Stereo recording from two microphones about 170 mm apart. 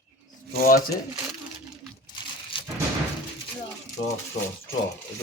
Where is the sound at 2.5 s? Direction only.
30° left (ahead or behind).